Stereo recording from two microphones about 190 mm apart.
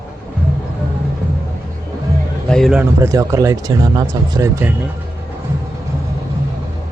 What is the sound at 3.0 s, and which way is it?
Speech, 15° right (ahead or behind).